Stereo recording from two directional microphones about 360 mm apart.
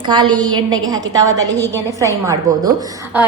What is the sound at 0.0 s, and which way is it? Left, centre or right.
A woman's voice, centre.